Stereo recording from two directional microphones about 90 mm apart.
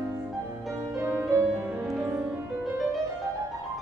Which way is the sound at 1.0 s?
30° right (ahead or behind).